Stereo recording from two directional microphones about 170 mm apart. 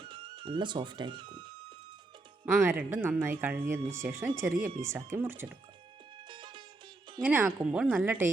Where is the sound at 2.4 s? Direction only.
10° right (ahead or behind).